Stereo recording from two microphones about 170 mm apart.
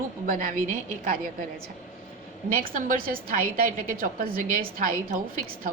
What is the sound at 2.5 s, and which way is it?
A woman's voice, 55° right (ahead or behind).